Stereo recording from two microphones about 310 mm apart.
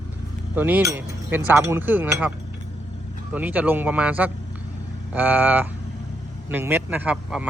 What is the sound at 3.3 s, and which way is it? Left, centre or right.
Speech, centre.